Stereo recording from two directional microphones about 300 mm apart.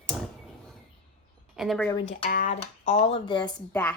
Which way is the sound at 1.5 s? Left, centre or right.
Centre.